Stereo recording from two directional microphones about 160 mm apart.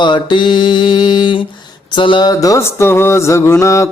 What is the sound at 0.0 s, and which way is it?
Mantra, 30° left (ahead or behind).